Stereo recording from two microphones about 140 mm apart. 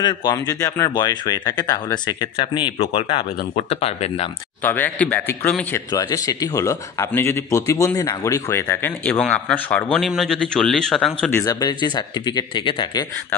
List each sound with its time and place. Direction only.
0.0 s a man's voice: 30° left (ahead or behind); by 4.3 s 45° left (ahead or behind)
4.6 s speech: 15° left (ahead or behind)
5.9 s speech: 25° left (ahead or behind); by 11.2 s 5° left (ahead or behind)
11.2 s speech: 20° left (ahead or behind)